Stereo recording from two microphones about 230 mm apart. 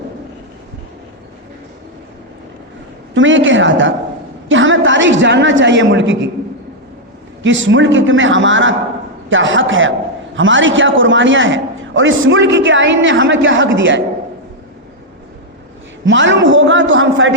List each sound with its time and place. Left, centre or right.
3.2 s a man's voice: right
7.4 s a man's voice: right
16.0 s a man's voice: right